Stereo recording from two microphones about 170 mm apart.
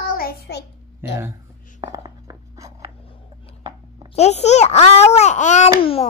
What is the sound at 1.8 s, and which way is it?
Writing, 20° right (ahead or behind).